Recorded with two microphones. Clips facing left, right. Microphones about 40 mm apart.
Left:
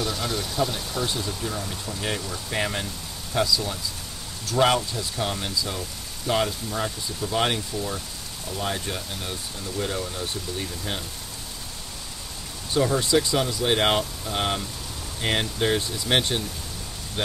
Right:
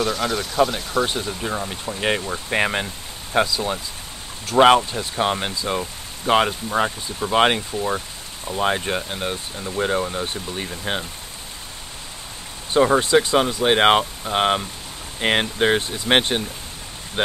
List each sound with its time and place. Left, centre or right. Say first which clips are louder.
0.0 s speech: right 5 dB; right
12.7 s speech: right 6 dB; right